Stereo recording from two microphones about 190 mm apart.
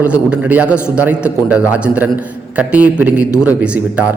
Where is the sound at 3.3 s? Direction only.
15° left (ahead or behind).